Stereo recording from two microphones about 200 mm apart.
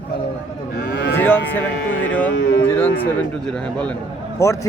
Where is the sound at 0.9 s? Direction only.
60° left (ahead or behind).